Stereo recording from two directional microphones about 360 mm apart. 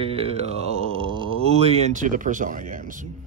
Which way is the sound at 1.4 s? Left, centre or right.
Centre.